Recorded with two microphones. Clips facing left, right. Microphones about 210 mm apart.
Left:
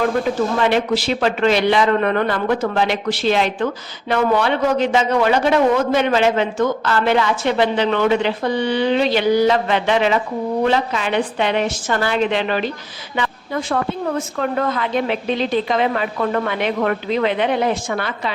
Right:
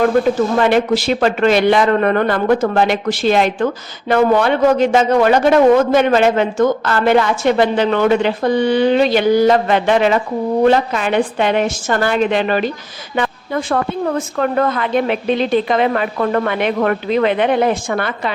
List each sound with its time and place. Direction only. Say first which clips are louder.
0.6 s a man's voice: right 4 dB; 50° right (ahead or behind)
13.1 s a sound: right 4 dB; 50° right (ahead or behind)
14.3 s a woman's voice: right 5 dB; 55° right (ahead or behind)